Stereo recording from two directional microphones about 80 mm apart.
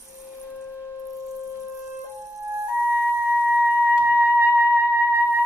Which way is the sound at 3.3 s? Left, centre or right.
Centre.